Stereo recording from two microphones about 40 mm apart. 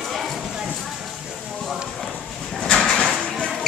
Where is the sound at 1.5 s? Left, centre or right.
Centre.